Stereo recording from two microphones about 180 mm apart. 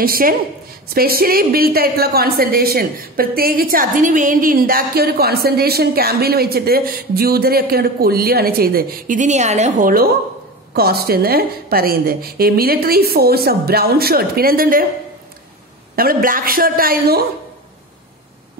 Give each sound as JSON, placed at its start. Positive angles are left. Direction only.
{"t": 0.0, "sound": "a woman's voice", "side_deg": -55}
{"t": 16.0, "sound": "a man's voice", "side_deg": -55}